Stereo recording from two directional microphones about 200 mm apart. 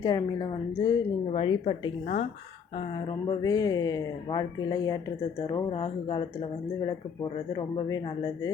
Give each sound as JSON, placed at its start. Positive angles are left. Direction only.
{"t": 0.0, "sound": "a woman's voice", "side_deg": 20}
{"t": 3.2, "sound": "a woman's voice", "side_deg": 20}
{"t": 7.5, "sound": "a woman's voice", "side_deg": 20}